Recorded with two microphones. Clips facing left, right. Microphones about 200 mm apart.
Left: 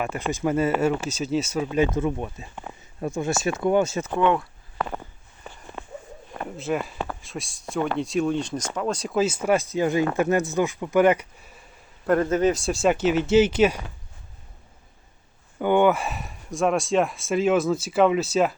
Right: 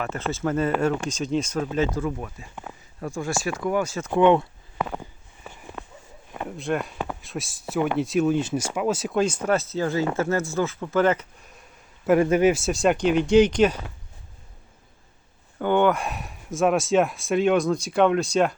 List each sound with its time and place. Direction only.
0.0 s speech: 15° left (ahead or behind)
2.0 s speech: 25° left (ahead or behind)
4.1 s a sound: 20° right (ahead or behind)
4.9 s a sound: 5° right (ahead or behind)
7.1 s speech: centre (ahead or behind)
12.0 s speech: 10° right (ahead or behind); by 13.8 s 10° left (ahead or behind)
15.5 s speech: 10° left (ahead or behind)